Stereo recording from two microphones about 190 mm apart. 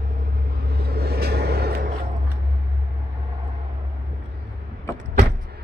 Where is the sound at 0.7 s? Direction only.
55° right (ahead or behind).